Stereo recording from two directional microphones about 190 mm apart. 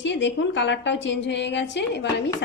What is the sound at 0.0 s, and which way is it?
A woman's voice, 70° left (ahead or behind).